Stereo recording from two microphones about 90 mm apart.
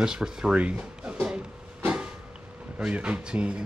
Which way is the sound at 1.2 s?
10° right (ahead or behind).